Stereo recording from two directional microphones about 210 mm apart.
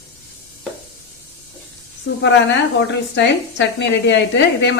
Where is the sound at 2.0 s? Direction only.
55° left (ahead or behind).